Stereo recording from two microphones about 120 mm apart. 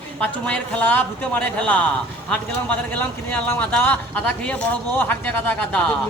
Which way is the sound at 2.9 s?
15° left (ahead or behind).